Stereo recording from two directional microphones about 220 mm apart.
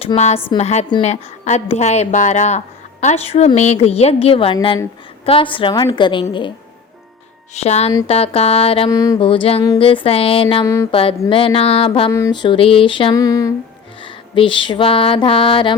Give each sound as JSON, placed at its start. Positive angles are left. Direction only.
{"t": 0.0, "sound": "a woman's voice", "side_deg": 30}
{"t": 7.5, "sound": "a woman's voice", "side_deg": 30}
{"t": 14.0, "sound": "music", "side_deg": 25}